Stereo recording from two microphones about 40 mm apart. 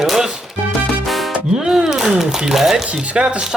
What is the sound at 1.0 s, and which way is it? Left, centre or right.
Music, centre.